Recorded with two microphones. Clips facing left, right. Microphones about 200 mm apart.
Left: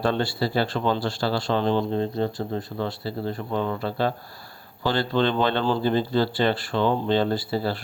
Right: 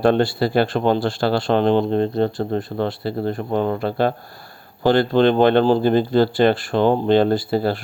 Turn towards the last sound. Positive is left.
turn(degrees=-50)  # may be behind; listen again after turning